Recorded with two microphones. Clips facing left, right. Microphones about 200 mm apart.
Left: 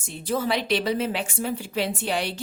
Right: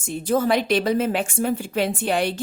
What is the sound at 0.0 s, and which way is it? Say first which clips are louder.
A woman's voice: right 5 dB; 50° right (ahead or behind).